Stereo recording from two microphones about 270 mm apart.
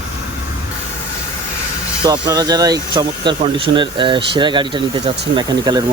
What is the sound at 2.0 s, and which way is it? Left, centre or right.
Speech, centre.